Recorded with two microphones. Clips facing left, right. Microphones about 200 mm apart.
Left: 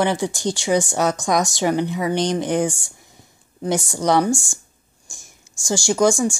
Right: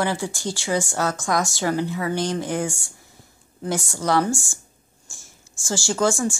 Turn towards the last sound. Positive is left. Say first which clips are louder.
# left 4 dB
turn(degrees=15)  # may be behind; listen again after turning